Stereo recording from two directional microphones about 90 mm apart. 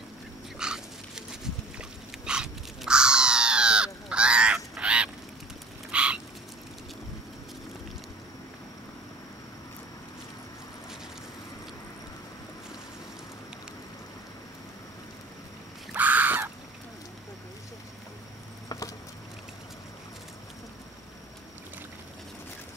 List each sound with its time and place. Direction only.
0.6 s dog: 5° right (ahead or behind)
5.9 s frog: 10° right (ahead or behind)
15.9 s crow: 20° right (ahead or behind)